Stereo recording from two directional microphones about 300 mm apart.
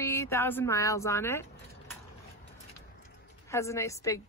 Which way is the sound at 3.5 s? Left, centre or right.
Centre.